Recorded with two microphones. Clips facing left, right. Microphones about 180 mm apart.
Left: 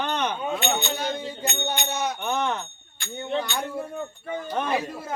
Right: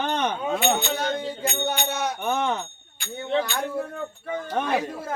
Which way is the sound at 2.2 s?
15° right (ahead or behind).